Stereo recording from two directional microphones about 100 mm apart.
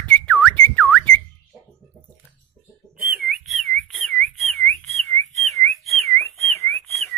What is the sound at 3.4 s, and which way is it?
Whistling, centre (ahead or behind).